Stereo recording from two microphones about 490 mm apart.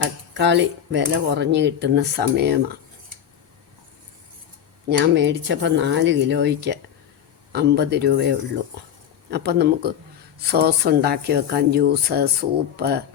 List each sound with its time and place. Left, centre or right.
0.3 s speech: right
4.9 s speech: right